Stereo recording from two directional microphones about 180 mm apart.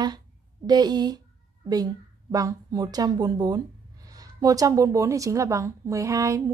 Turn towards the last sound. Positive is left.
turn(degrees=-15)  # may be behind; listen again after turning